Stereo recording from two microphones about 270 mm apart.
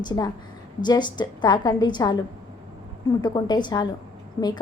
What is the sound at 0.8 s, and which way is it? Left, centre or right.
A woman's voice, centre.